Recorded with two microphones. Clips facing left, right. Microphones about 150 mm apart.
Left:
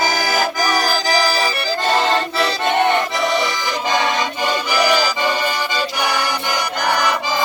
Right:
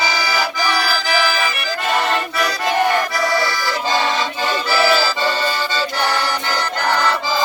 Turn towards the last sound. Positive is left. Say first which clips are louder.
# even
turn(degrees=15)  # may be behind; listen again after turning